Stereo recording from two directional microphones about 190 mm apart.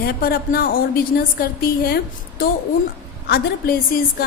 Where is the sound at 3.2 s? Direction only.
55° left (ahead or behind).